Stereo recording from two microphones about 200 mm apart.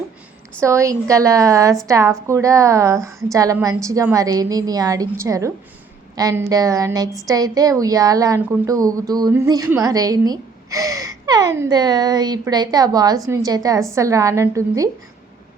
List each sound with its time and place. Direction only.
0.6 s a woman's voice: 15° right (ahead or behind)